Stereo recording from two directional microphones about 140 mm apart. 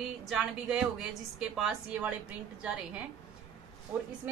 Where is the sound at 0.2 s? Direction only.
5° right (ahead or behind).